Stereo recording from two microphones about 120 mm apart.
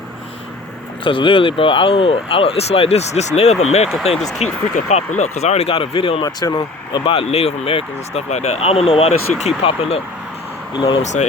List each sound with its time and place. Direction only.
1.0 s speech: 45° left (ahead or behind)
11.0 s speech: 75° left (ahead or behind)